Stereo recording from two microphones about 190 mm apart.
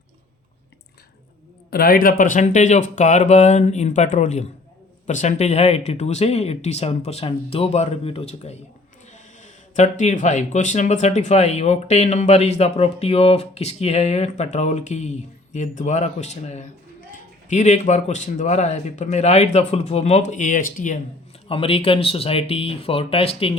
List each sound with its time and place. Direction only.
1.7 s speech: 50° left (ahead or behind)
21.4 s speech: 30° left (ahead or behind)